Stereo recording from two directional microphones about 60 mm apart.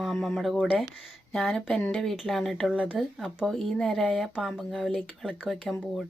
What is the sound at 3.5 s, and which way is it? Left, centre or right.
Speech, centre.